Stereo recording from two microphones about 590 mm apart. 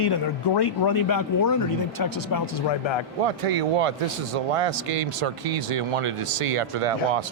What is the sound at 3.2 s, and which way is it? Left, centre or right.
A man's voice, right.